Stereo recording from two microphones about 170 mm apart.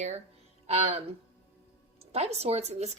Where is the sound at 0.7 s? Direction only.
40° right (ahead or behind).